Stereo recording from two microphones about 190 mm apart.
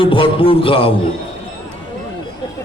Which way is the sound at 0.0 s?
30° left (ahead or behind).